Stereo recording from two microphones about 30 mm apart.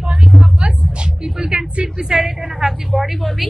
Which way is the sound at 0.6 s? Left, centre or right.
Right.